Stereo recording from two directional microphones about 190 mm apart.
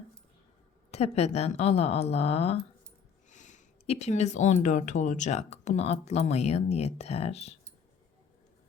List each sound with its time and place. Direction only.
0.9 s speech: 35° left (ahead or behind)